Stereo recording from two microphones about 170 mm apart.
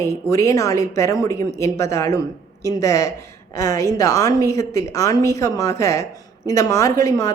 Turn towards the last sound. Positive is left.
turn(degrees=20)  # may be behind; listen again after turning